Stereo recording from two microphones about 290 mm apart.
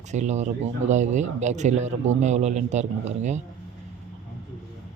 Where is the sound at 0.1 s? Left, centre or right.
Right.